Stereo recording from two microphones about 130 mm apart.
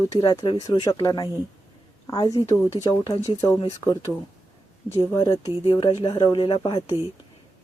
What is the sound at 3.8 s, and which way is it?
Speech, 30° left (ahead or behind).